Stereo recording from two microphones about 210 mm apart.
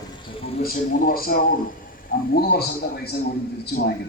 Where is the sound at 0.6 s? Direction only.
45° left (ahead or behind).